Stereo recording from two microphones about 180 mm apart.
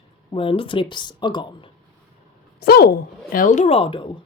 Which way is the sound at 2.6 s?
60° left (ahead or behind).